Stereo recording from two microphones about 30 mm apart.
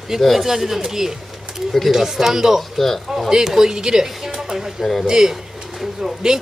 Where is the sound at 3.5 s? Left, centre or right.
Centre.